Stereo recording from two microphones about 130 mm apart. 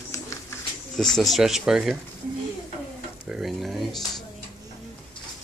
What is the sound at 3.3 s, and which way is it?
Frying, centre (ahead or behind).